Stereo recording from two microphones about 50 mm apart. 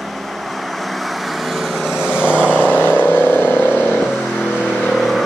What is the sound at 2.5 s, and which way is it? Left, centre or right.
Vehicle, left.